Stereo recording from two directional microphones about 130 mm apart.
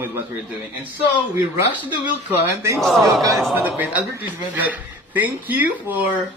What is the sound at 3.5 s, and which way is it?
Speech, 15° right (ahead or behind).